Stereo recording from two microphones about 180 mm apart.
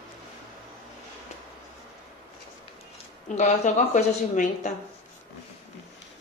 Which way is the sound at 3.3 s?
40° left (ahead or behind).